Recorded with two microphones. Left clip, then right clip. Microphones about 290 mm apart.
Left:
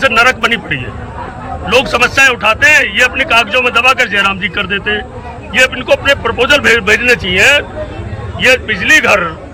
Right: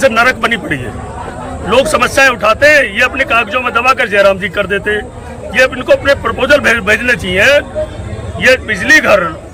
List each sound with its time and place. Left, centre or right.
0.0 s a man's voice: centre